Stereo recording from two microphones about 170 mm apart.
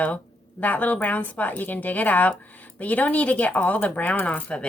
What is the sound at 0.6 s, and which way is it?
Speech, 10° left (ahead or behind).